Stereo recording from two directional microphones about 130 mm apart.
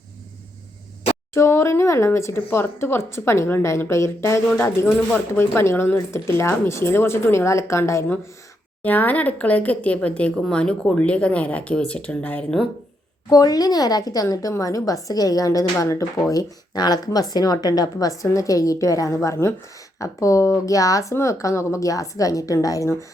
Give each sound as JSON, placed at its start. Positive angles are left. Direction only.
{"t": 1.3, "sound": "speech", "side_deg": 20}
{"t": 13.3, "sound": "speech", "side_deg": 30}